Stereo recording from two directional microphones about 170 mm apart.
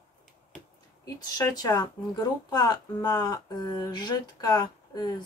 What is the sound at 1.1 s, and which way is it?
Speech, 20° left (ahead or behind).